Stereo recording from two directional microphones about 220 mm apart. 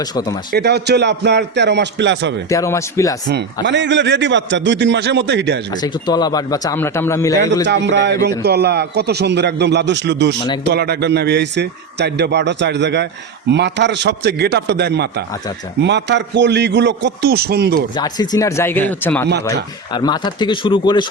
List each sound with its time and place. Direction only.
0.0 s speech: 15° left (ahead or behind)
0.5 s a man's voice: 50° right (ahead or behind)
2.5 s speech: 15° left (ahead or behind)
3.2 s a man's voice: 55° right (ahead or behind)
5.7 s speech: 20° left (ahead or behind)
7.3 s a man's voice: 55° right (ahead or behind)
17.9 s speech: 20° left (ahead or behind)
19.9 s speech: 20° left (ahead or behind)